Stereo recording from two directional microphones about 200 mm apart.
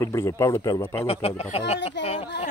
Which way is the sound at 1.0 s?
30° left (ahead or behind).